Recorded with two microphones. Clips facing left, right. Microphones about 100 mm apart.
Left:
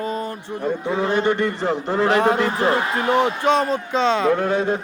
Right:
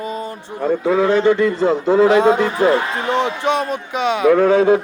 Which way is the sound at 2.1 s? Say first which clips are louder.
Right 4 dB; 20° right (ahead or behind).